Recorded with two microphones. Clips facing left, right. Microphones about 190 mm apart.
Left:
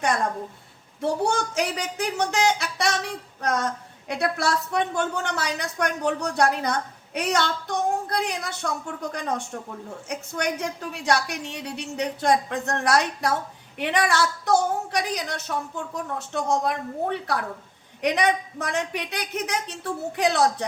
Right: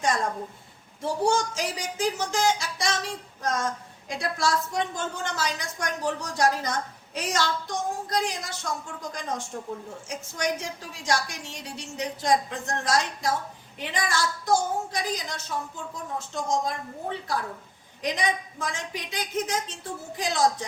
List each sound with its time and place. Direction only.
1.0 s a woman's voice: 65° left (ahead or behind)